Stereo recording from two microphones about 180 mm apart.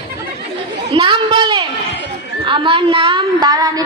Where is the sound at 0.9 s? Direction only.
25° right (ahead or behind).